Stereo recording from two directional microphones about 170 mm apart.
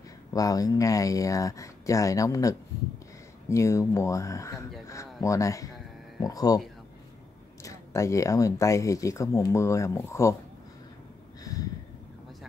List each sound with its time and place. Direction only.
0.3 s speech: 20° left (ahead or behind)
7.6 s speech: 20° left (ahead or behind)